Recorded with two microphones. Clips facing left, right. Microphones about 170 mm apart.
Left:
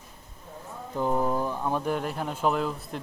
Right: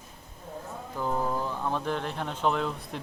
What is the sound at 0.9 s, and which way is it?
Speech, 15° left (ahead or behind).